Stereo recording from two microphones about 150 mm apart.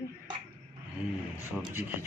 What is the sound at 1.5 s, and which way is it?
Speech, centre (ahead or behind).